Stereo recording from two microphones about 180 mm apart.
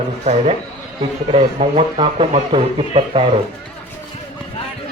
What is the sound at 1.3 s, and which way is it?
A man's voice, 35° right (ahead or behind).